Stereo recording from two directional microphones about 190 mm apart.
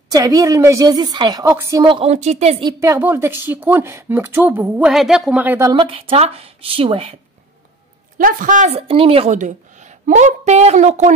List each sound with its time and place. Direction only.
0.1 s a woman's voice: 20° right (ahead or behind)
1.9 s a woman's voice: 30° right (ahead or behind)
2.6 s a woman's voice: 15° right (ahead or behind)
5.7 s a woman's voice: 25° right (ahead or behind)
8.2 s a woman's voice: 45° right (ahead or behind)